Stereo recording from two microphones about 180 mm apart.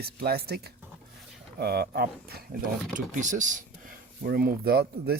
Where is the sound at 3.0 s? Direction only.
45° right (ahead or behind).